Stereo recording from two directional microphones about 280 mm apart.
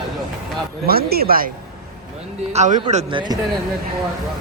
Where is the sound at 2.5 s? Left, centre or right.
Right.